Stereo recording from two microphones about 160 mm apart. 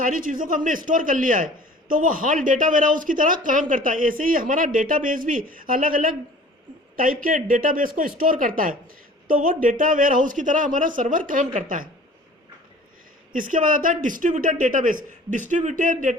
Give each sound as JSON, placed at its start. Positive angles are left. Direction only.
{"t": 0.0, "sound": "speech", "side_deg": -55}
{"t": 13.3, "sound": "speech", "side_deg": -55}